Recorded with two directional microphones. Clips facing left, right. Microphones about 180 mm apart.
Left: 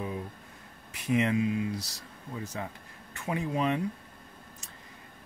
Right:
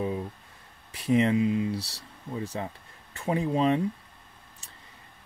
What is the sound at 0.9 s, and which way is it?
Speech, 30° right (ahead or behind).